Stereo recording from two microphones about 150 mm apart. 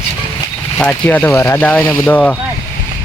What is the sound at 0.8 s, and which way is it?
Speech, 10° left (ahead or behind).